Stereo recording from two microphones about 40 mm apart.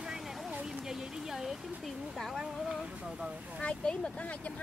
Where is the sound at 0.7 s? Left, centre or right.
Centre.